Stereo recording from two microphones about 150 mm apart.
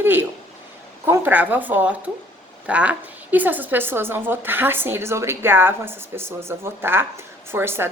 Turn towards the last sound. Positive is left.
turn(degrees=-15)  # may be behind; listen again after turning